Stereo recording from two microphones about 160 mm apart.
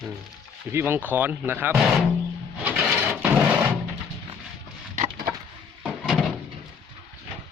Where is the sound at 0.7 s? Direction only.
15° right (ahead or behind).